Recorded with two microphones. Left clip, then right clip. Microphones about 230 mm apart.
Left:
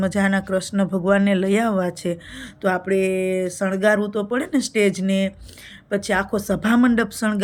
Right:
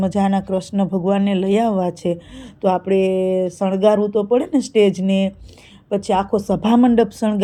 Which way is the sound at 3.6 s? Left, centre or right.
Centre.